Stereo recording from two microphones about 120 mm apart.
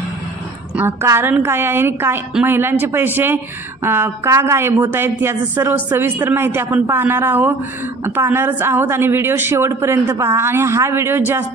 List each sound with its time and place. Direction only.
0.7 s speech: 20° right (ahead or behind)